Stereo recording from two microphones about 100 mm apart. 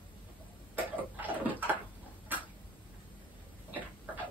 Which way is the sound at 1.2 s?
15° right (ahead or behind).